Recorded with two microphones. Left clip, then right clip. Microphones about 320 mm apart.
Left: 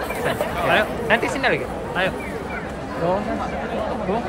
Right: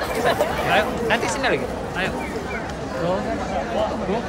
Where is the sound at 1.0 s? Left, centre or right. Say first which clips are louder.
Left 1 dB; left.